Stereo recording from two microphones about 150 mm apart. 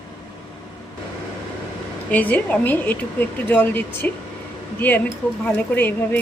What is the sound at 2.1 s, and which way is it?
Speech, 10° left (ahead or behind).